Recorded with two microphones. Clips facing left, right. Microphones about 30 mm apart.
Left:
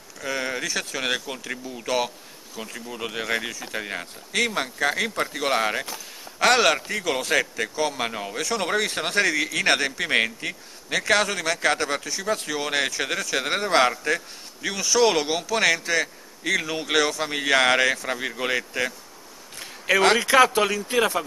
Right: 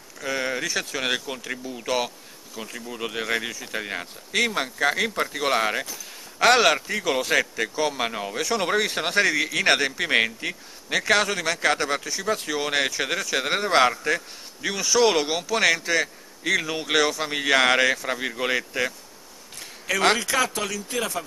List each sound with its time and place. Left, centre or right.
0.2 s a man's voice: centre
20.2 s speech: left